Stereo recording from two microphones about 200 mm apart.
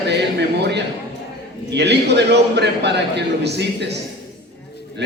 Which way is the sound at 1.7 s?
55° right (ahead or behind).